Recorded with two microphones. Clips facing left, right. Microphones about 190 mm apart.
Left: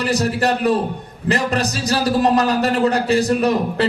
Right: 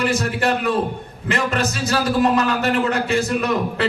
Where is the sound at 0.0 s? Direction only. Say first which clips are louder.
Left 2 dB; 40° left (ahead or behind).